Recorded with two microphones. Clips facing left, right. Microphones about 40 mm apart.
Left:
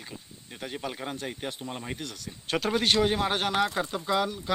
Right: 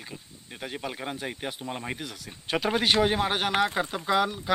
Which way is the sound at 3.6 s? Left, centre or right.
Right.